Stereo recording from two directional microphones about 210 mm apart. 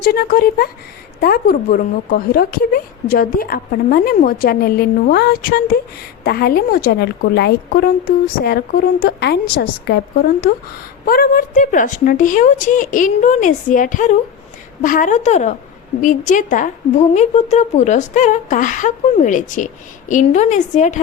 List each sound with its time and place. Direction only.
0.0 s a woman's voice: 45° left (ahead or behind)